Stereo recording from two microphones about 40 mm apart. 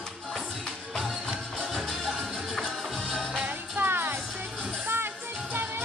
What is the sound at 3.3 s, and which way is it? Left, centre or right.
Music, right.